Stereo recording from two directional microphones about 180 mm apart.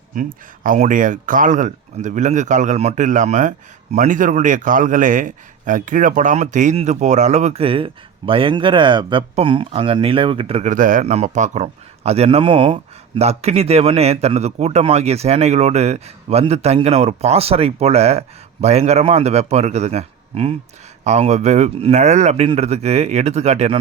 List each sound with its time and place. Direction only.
0.1 s a man's voice: 50° right (ahead or behind)